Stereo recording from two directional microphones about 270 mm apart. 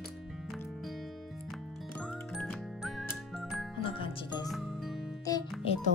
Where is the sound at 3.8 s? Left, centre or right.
Centre.